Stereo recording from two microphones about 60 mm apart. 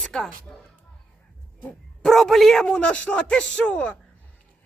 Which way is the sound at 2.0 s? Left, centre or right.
Centre.